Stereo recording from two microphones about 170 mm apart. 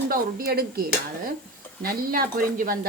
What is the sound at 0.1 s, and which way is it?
Speech, 60° right (ahead or behind).